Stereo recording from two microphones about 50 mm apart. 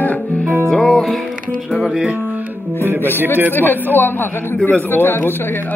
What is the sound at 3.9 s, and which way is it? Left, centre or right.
Speech, left.